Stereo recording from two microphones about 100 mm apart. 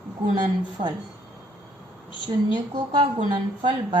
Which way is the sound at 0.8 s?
90° right.